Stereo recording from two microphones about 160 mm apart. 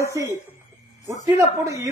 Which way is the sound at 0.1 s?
20° right (ahead or behind).